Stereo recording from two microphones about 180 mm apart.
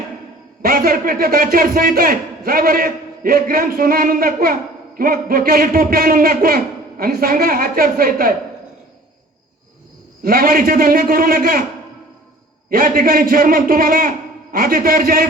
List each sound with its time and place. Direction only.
0.6 s a man's voice: 55° right (ahead or behind)
10.2 s a man's voice: 55° right (ahead or behind)
12.7 s a man's voice: 55° right (ahead or behind)